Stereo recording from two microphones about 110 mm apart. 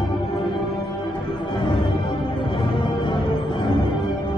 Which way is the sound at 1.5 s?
50° left (ahead or behind).